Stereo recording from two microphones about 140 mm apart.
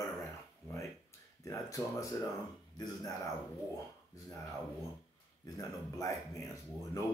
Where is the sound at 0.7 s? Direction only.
20° left (ahead or behind).